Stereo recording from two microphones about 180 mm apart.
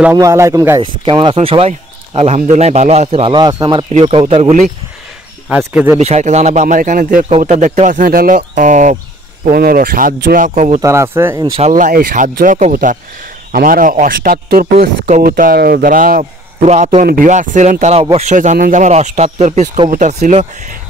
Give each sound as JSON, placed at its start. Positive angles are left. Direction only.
{"t": 0.0, "sound": "a man's voice", "side_deg": -15}
{"t": 1.0, "sound": "speech", "side_deg": -25}
{"t": 5.5, "sound": "a man's voice", "side_deg": -5}
{"t": 5.9, "sound": "speech", "side_deg": -40}
{"t": 7.2, "sound": "a man's voice", "side_deg": -35}
{"t": 9.4, "sound": "a man's voice", "side_deg": -55}
{"t": 10.8, "sound": "a man's voice", "side_deg": -15}
{"t": 11.6, "sound": "a man's voice", "side_deg": -45}